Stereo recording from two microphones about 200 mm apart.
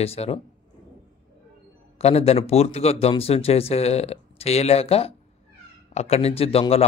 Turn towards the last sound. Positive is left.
turn(degrees=30)  # may be behind; listen again after turning